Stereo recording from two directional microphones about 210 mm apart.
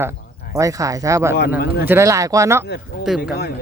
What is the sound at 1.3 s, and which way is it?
Speech, 50° left (ahead or behind).